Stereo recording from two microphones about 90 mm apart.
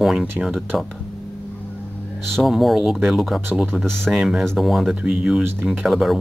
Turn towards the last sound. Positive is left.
turn(degrees=0)  # may be behind; listen again after turning